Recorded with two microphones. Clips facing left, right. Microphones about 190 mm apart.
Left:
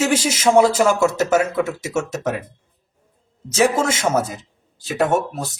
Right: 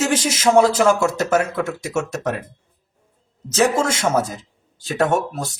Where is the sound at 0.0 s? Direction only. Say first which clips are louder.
Left 1 dB; 10° left (ahead or behind).